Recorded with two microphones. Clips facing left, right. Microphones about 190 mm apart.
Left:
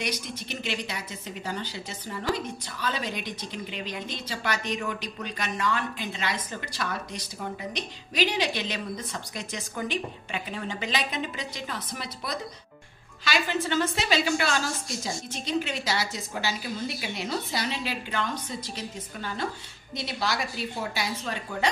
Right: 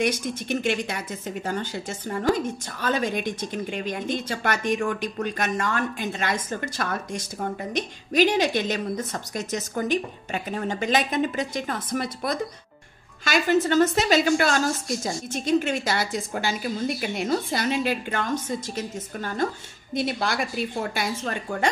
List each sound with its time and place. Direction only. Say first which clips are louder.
0.0 s speech: right 8 dB; 50° right (ahead or behind)